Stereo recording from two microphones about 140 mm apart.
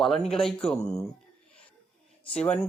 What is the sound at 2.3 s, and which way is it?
Speech, 10° left (ahead or behind).